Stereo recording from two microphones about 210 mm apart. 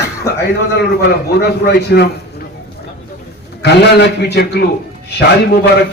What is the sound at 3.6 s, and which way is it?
A man's voice, 50° left (ahead or behind).